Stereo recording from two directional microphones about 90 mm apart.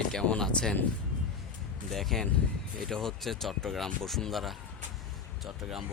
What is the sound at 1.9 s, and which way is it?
Speech, centre (ahead or behind).